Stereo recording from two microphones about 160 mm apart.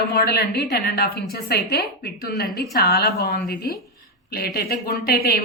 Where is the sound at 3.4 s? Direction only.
75° left (ahead or behind).